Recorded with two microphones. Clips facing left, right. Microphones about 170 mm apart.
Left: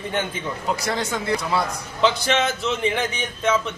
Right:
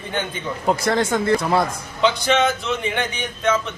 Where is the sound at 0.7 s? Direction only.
50° right (ahead or behind).